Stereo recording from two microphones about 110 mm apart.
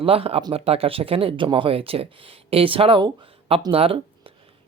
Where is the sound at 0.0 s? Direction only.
60° right (ahead or behind).